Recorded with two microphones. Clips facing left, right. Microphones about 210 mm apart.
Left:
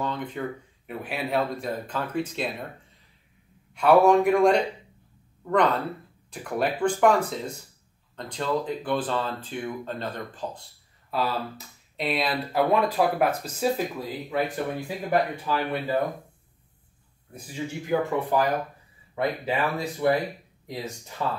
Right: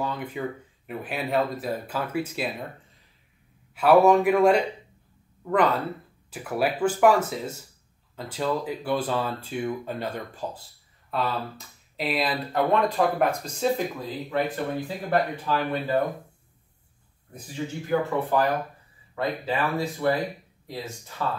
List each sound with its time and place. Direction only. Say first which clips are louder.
0.0 s speech: even; 10° right (ahead or behind)
3.7 s speech: even; centre (ahead or behind)
11.1 s speech: even; centre (ahead or behind)
17.8 s speech: even; 15° left (ahead or behind)